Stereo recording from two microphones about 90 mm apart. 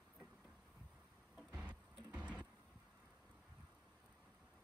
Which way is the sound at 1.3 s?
15° right (ahead or behind).